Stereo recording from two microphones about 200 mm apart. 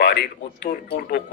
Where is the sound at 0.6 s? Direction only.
50° left (ahead or behind).